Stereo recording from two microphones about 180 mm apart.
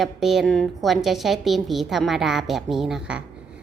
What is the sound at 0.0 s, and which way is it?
A woman's voice, centre (ahead or behind).